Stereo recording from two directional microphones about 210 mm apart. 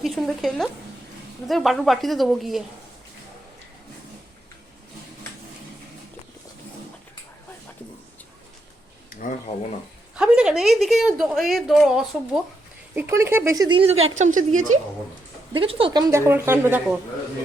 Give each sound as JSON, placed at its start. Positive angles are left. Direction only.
{"t": 0.0, "sound": "a woman's voice", "side_deg": 0}
{"t": 10.2, "sound": "a woman's voice", "side_deg": -5}
{"t": 13.0, "sound": "a woman's voice", "side_deg": -10}
{"t": 14.0, "sound": "a woman's voice", "side_deg": -35}
{"t": 15.5, "sound": "a woman's voice", "side_deg": -25}